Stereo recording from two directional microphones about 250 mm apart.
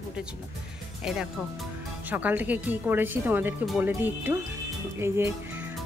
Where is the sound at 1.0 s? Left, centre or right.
Centre.